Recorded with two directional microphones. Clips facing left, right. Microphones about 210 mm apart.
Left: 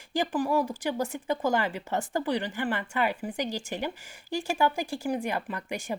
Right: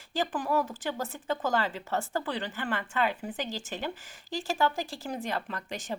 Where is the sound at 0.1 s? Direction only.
10° left (ahead or behind).